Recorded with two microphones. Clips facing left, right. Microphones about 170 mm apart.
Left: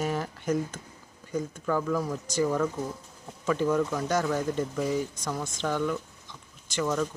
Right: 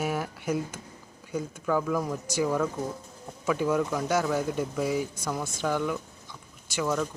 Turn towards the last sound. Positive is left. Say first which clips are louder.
# even
turn(degrees=-5)  # may be behind; listen again after turning